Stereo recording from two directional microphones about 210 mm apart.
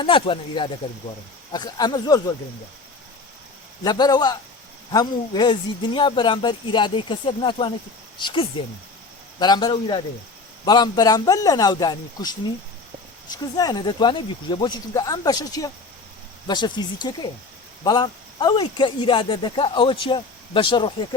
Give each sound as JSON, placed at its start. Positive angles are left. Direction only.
{"t": 0.0, "sound": "speech", "side_deg": 25}
{"t": 3.8, "sound": "speech", "side_deg": 20}